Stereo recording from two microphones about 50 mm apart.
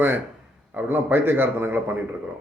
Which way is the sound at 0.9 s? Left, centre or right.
Right.